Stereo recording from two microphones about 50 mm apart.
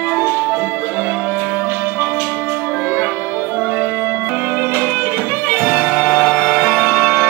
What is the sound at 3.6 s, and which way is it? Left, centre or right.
Music, left.